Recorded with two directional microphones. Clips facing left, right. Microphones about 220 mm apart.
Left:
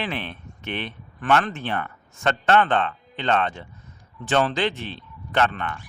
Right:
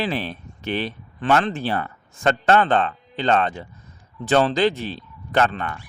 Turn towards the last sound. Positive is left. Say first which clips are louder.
# right 2 dB
turn(degrees=-40)  # may be behind; listen again after turning